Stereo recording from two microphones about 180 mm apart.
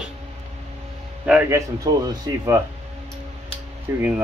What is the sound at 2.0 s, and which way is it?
Speech, 20° right (ahead or behind).